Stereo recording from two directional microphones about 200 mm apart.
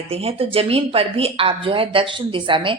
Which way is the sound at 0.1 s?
30° right (ahead or behind).